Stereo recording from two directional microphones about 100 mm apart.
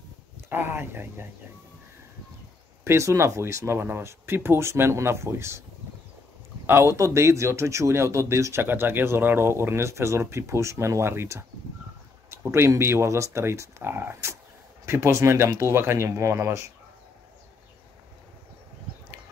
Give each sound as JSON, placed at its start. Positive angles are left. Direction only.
{"t": 0.5, "sound": "speech", "side_deg": -20}
{"t": 2.8, "sound": "speech", "side_deg": -30}
{"t": 6.6, "sound": "speech", "side_deg": -25}